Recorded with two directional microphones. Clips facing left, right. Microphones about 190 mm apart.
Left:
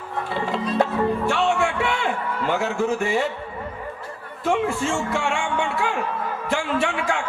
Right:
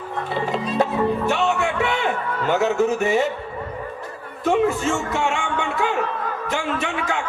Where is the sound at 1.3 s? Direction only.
20° right (ahead or behind).